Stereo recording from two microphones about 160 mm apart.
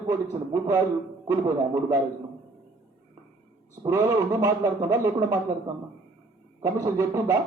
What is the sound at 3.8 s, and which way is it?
Speech, 20° right (ahead or behind).